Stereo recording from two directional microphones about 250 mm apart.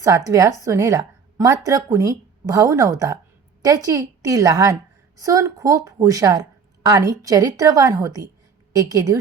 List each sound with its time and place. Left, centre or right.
0.0 s a woman's voice: centre